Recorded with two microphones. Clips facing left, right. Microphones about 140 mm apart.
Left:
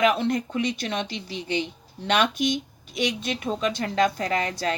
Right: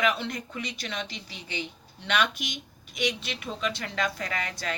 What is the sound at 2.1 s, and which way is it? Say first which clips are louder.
Speech: left 6 dB; 45° left (ahead or behind).